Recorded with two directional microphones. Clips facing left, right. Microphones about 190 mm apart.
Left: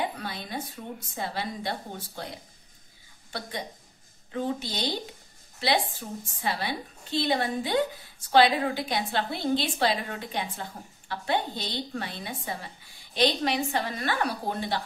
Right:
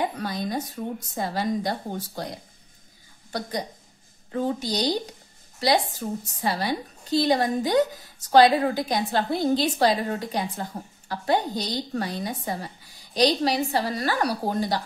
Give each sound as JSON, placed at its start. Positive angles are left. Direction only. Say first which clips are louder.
{"t": 0.1, "sound": "a woman's voice", "louder": "right 7 dB", "side_deg": -40}